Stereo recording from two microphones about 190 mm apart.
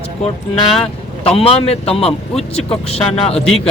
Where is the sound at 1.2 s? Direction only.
30° left (ahead or behind).